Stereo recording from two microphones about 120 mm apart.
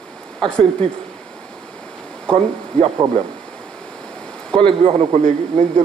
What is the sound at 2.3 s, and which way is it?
Speech, 10° left (ahead or behind).